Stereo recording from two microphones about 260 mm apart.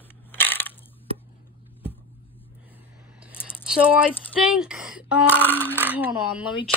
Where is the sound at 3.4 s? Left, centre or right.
Centre.